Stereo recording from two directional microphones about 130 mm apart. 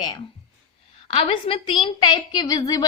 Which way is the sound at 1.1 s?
45° left (ahead or behind).